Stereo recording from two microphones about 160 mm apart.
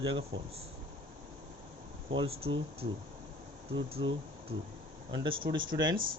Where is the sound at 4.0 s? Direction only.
30° right (ahead or behind).